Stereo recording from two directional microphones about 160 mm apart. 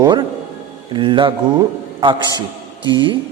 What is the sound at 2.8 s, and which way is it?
Speech, 30° right (ahead or behind).